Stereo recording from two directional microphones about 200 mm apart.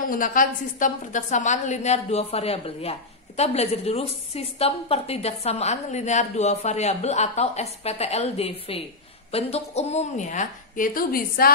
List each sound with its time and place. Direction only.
0.1 s a woman's voice: 45° left (ahead or behind)